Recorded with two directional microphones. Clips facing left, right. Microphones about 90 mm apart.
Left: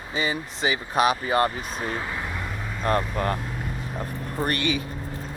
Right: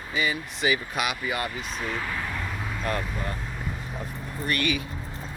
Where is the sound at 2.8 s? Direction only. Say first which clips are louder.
Left 6 dB; 40° left (ahead or behind).